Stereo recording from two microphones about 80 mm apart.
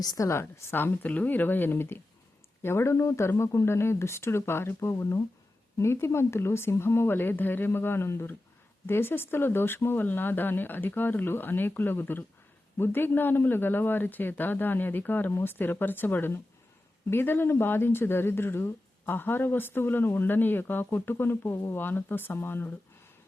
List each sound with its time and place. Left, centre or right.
0.0 s a woman's voice: left
0.3 s speech: left